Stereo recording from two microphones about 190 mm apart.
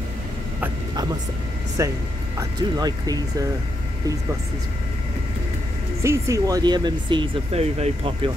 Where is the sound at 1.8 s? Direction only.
15° right (ahead or behind).